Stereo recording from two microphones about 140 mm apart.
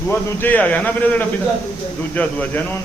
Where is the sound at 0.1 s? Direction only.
15° left (ahead or behind).